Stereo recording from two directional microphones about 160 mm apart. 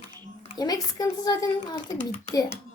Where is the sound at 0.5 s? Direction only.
25° left (ahead or behind).